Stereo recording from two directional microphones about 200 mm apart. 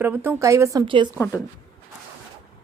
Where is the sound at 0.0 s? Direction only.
10° right (ahead or behind).